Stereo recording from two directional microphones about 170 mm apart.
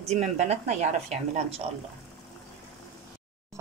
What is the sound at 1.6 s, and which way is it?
Speech, 40° right (ahead or behind).